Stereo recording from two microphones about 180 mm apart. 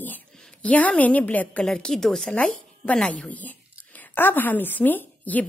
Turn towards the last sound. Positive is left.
turn(degrees=10)  # may be behind; listen again after turning